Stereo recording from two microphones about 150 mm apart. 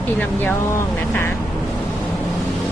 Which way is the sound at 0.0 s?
10° left (ahead or behind).